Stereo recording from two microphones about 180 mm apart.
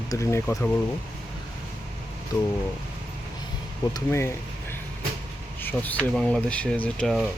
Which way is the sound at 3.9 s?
15° left (ahead or behind).